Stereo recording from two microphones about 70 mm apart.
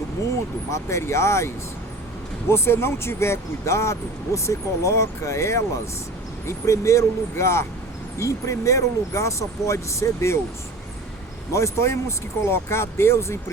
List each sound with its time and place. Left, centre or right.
0.7 s speech: left
11.5 s speech: left